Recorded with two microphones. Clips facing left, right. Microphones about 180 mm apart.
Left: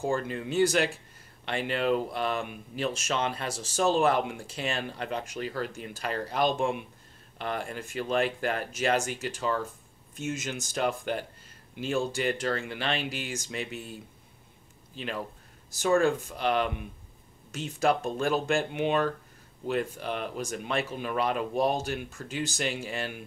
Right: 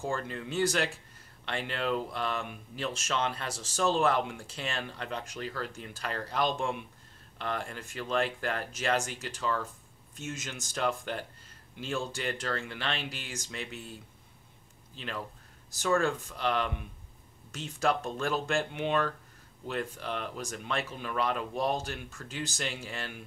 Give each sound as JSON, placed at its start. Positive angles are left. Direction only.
{"t": 0.0, "sound": "speech", "side_deg": 15}
{"t": 15.0, "sound": "speech", "side_deg": 15}